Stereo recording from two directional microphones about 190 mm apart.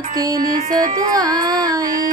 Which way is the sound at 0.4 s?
20° right (ahead or behind).